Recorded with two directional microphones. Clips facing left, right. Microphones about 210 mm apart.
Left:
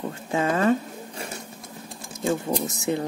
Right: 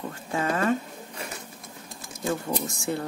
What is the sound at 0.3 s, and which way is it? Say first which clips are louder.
Dishes: left 4 dB; 25° left (ahead or behind).